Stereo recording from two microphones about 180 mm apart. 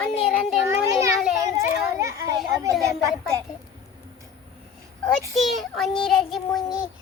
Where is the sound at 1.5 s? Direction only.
15° right (ahead or behind).